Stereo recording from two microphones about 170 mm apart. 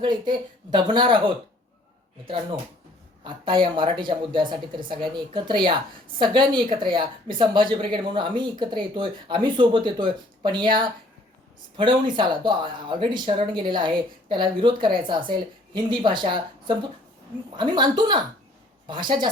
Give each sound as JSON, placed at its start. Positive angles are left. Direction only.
{"t": 0.0, "sound": "a woman's voice", "side_deg": -25}
{"t": 3.2, "sound": "a woman's voice", "side_deg": -30}